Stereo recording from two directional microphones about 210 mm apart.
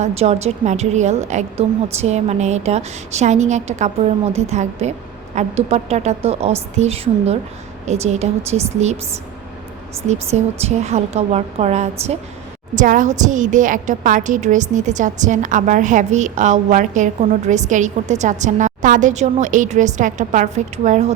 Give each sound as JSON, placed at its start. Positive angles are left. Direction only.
{"t": 0.0, "sound": "a woman's voice", "side_deg": -30}
{"t": 10.3, "sound": "a woman's voice", "side_deg": -30}